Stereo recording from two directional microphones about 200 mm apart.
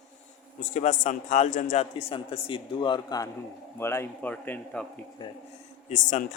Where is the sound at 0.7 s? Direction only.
40° left (ahead or behind); by 4.8 s 5° left (ahead or behind).